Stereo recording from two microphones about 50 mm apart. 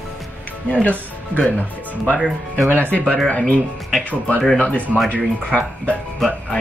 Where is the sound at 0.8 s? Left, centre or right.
Left.